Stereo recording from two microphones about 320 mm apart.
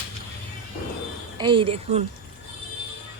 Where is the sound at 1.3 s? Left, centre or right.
Centre.